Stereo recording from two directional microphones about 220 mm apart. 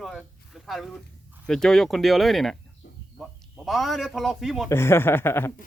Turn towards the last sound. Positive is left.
turn(degrees=10)  # may be behind; listen again after turning